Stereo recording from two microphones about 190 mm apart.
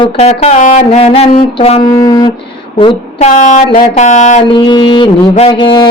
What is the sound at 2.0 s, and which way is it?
Speech, 25° left (ahead or behind).